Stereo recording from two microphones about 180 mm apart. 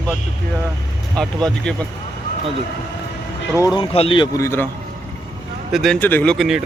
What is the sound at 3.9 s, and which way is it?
Speech, 30° left (ahead or behind).